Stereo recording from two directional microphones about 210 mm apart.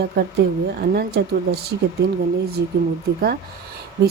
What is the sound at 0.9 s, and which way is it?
Speech, 50° right (ahead or behind).